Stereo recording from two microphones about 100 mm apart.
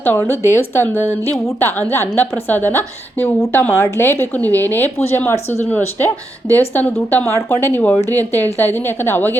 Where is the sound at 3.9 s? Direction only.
20° left (ahead or behind).